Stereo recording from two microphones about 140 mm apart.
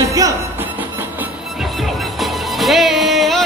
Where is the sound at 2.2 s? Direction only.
Centre (ahead or behind).